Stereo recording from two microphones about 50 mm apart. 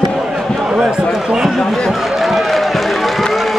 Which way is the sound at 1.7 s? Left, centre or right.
Centre.